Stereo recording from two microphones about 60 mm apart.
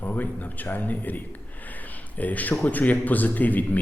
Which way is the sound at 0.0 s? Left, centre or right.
Left.